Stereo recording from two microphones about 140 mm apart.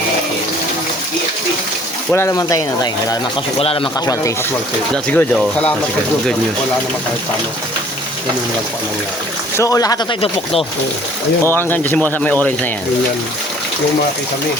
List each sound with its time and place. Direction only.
2.1 s speech: 20° left (ahead or behind)
3.6 s speech: 45° left (ahead or behind)
4.0 s speech: 25° left (ahead or behind)
5.0 s speech: 10° left (ahead or behind)
9.6 s speech: 25° left (ahead or behind)
11.4 s speech: 15° left (ahead or behind)